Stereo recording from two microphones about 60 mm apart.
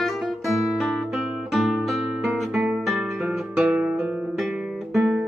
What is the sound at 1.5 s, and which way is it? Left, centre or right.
Music, centre.